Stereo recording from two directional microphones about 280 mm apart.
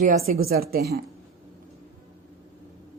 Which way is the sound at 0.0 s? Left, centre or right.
Right.